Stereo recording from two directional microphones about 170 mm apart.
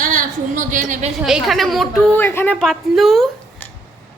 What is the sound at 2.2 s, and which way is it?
Speech, 10° left (ahead or behind).